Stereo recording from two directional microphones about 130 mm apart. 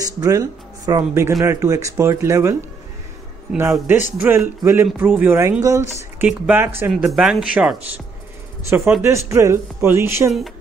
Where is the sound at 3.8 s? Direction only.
15° right (ahead or behind).